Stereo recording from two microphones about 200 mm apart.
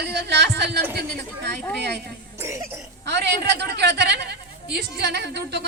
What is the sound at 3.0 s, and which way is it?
Speech, 60° right (ahead or behind).